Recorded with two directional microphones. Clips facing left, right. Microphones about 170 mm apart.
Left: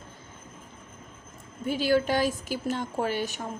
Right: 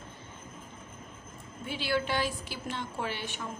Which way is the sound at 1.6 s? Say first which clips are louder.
Left 7 dB; 45° left (ahead or behind).